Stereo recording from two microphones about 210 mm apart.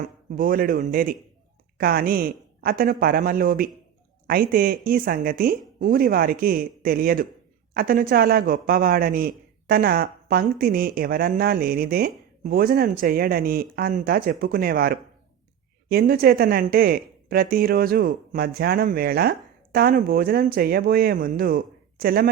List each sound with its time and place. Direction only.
0.0 s speech: 40° right (ahead or behind)